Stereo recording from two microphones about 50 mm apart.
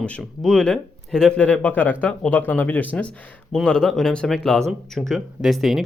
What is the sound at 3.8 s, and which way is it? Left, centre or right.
Speech, centre.